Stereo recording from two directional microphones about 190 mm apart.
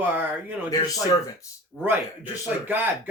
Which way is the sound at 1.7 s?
5° right (ahead or behind).